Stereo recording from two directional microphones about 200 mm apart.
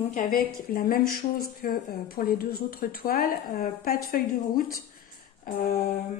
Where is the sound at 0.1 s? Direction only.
45° left (ahead or behind).